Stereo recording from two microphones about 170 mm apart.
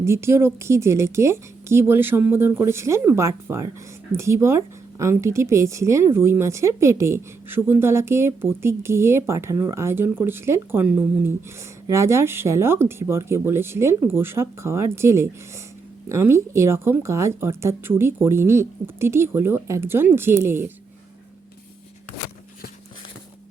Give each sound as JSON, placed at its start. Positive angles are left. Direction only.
{"t": 0.0, "sound": "a woman's voice", "side_deg": -15}